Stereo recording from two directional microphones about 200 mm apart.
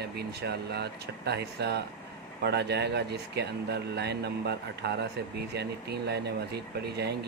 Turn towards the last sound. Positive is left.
turn(degrees=-55)  # may be behind; listen again after turning